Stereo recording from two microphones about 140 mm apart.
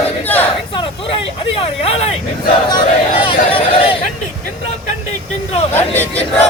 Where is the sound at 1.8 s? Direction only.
45° left (ahead or behind).